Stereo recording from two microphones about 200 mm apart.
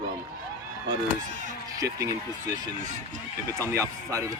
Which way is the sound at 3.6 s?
15° right (ahead or behind).